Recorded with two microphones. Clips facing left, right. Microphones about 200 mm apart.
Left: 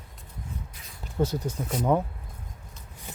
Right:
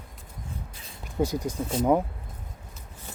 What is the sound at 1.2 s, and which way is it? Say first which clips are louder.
Speech: right 1 dB; 10° right (ahead or behind).